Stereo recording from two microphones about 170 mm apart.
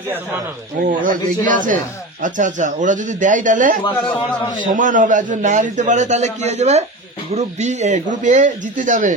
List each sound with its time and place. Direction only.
0.8 s a man's voice: 50° right (ahead or behind)
3.9 s a man's voice: 10° left (ahead or behind)
4.6 s a man's voice: 50° right (ahead or behind)